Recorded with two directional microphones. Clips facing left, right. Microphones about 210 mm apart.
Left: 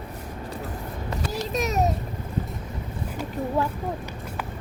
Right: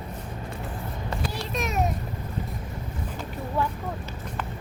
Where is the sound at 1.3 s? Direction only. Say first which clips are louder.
Left 5 dB; 40° left (ahead or behind).